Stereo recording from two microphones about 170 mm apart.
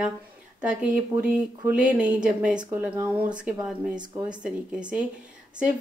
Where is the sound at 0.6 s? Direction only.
10° right (ahead or behind).